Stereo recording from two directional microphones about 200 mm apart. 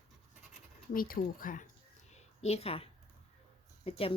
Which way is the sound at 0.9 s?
45° left (ahead or behind).